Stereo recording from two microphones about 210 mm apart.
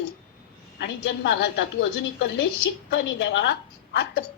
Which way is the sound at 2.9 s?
55° left (ahead or behind).